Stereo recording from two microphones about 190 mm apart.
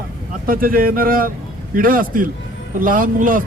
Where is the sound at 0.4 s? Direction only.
50° right (ahead or behind).